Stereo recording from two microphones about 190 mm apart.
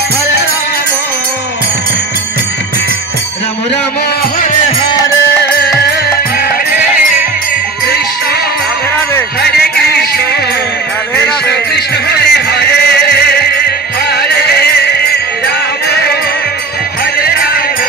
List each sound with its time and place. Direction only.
9.4 s music: 55° left (ahead or behind)
11.4 s music: 60° left (ahead or behind)